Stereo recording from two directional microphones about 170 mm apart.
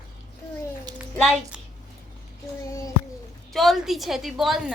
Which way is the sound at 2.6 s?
20° left (ahead or behind).